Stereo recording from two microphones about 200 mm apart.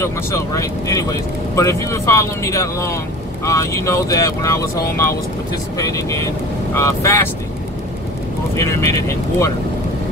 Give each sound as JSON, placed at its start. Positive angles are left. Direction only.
{"t": 0.0, "sound": "speech", "side_deg": 15}
{"t": 8.5, "sound": "speech", "side_deg": 15}